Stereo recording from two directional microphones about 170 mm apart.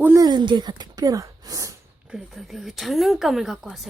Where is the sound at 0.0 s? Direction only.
20° right (ahead or behind).